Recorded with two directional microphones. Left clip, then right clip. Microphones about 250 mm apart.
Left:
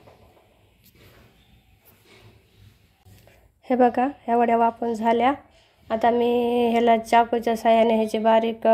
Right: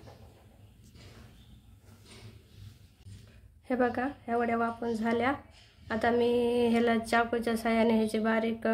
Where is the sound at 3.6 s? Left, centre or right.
Centre.